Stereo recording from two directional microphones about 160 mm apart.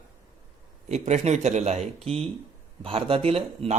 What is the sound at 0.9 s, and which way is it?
Speech, 45° right (ahead or behind).